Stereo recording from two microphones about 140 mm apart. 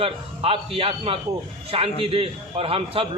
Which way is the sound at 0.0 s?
40° right (ahead or behind).